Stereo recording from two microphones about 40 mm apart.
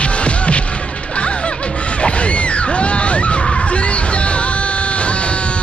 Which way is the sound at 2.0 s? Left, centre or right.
Left.